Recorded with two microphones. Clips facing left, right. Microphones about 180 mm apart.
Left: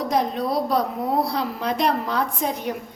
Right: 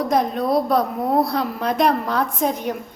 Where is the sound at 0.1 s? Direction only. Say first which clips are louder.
Right 3 dB; 55° right (ahead or behind).